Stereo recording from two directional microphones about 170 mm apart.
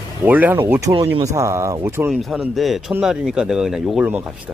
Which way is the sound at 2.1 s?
Centre (ahead or behind).